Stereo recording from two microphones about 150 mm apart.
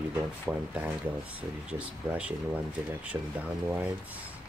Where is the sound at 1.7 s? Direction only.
10° right (ahead or behind).